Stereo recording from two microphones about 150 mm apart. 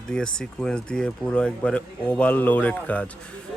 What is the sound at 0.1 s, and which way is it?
Speech, 5° left (ahead or behind).